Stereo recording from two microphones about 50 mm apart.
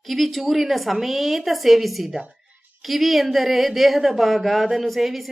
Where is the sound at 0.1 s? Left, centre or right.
Centre.